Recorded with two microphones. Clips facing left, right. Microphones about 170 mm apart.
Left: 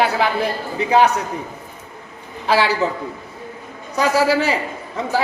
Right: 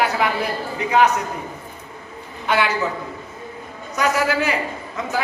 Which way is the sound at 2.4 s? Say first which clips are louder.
Left 3 dB; 30° left (ahead or behind).